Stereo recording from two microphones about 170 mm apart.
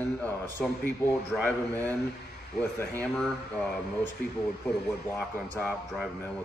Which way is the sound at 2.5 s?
10° left (ahead or behind).